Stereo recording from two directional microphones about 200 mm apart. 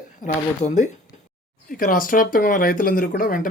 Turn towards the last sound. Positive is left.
turn(degrees=45)  # may be behind; listen again after turning